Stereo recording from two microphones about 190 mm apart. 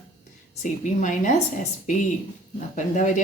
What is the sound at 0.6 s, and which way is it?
Speech, 40° left (ahead or behind).